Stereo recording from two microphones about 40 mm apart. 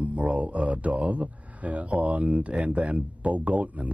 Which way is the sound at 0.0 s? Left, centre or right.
Right.